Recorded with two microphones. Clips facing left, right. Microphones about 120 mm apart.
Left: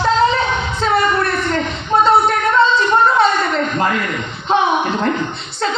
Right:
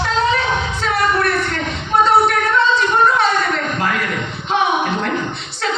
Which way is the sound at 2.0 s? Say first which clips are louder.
Even; 25° left (ahead or behind).